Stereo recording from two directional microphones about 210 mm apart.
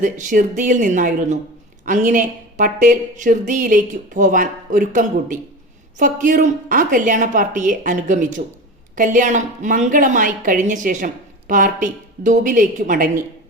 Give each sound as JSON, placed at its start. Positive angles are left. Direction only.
{"t": 0.0, "sound": "a woman's voice", "side_deg": -40}